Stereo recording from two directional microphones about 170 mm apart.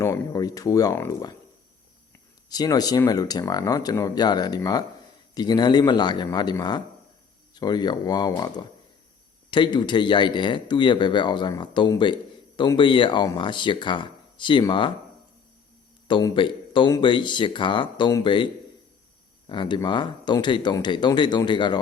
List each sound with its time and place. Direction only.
0.0 s speech: 20° left (ahead or behind)
2.5 s speech: 25° left (ahead or behind)
16.0 s speech: 30° left (ahead or behind)